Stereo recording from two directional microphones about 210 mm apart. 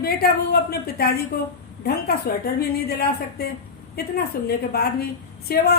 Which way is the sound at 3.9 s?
45° left (ahead or behind).